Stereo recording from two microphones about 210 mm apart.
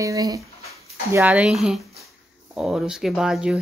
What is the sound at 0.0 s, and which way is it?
Speech, 15° right (ahead or behind).